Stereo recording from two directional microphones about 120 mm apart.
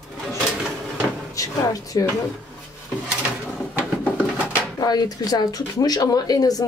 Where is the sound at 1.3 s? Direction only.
30° left (ahead or behind).